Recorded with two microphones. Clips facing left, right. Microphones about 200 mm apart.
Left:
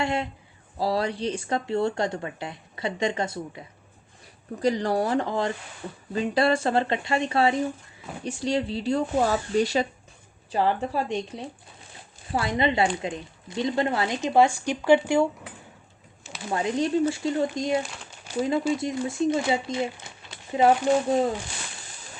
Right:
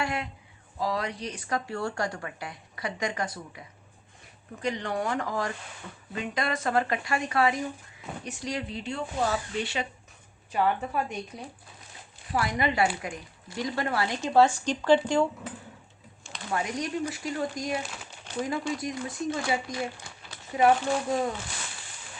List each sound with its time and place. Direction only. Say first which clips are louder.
0.0 s speech: left 5 dB; 25° left (ahead or behind)
4.6 s speech: left 6 dB; 35° left (ahead or behind); by 15.3 s 10° left (ahead or behind)
16.5 s speech: left 6 dB; 25° left (ahead or behind)
17.9 s crumpling: left 4 dB; centre (ahead or behind)
18.8 s speech: left 6 dB; 25° left (ahead or behind)